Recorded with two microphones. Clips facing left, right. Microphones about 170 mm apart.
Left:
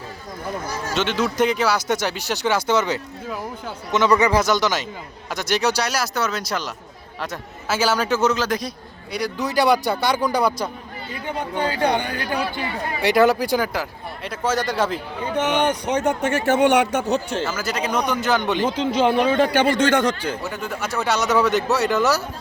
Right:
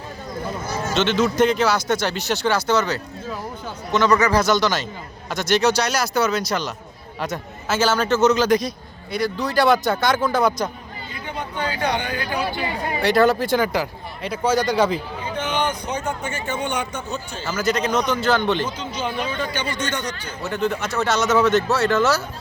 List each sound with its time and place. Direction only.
0.9 s a man's voice: 10° left (ahead or behind)
9.1 s speech: 15° left (ahead or behind)
13.0 s speech: 15° left (ahead or behind)
13.7 s a man's voice: centre (ahead or behind)
15.4 s speech: 70° left (ahead or behind)
17.4 s speech: 5° left (ahead or behind)
18.6 s a man's voice: 90° left
20.4 s speech: 10° left (ahead or behind)